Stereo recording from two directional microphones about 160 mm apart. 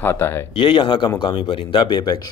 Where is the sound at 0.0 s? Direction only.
15° left (ahead or behind).